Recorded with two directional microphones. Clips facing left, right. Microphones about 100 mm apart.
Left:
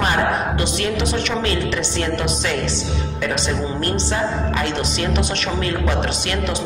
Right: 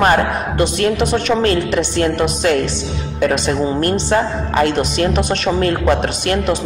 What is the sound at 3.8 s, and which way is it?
Music, 50° right (ahead or behind).